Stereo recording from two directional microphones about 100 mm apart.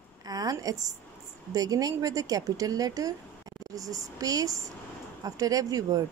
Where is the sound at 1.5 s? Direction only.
40° right (ahead or behind).